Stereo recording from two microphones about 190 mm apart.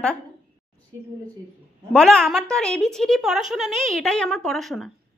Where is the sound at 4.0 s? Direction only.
5° left (ahead or behind).